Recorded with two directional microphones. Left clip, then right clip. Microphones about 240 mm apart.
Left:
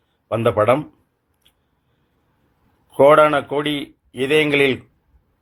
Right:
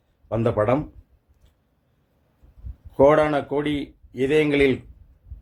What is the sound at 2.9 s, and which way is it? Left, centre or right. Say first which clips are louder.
A man's voice: left 5 dB; centre.